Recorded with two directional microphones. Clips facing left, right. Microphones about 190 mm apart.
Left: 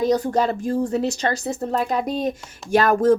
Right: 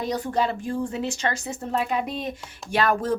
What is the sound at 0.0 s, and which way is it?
Speech, 40° left (ahead or behind).